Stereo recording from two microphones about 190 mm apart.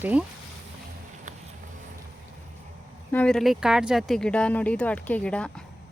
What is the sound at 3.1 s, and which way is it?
Speech, 5° left (ahead or behind).